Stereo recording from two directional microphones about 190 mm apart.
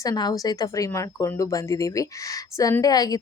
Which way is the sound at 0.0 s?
20° left (ahead or behind).